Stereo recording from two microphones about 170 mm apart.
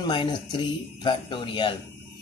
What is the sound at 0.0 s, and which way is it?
A man's voice, 25° left (ahead or behind).